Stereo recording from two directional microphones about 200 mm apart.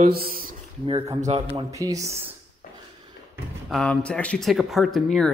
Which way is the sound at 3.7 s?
5° left (ahead or behind).